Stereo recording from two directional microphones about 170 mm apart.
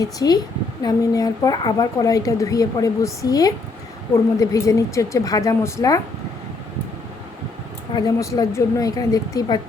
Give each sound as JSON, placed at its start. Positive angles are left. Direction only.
{"t": 0.0, "sound": "speech", "side_deg": 20}
{"t": 7.9, "sound": "speech", "side_deg": 20}